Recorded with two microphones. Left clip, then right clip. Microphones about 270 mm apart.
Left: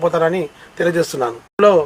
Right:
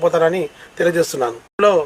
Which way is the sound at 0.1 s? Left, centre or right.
Centre.